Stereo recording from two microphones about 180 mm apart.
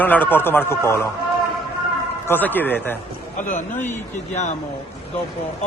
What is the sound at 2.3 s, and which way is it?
Speech, 10° left (ahead or behind).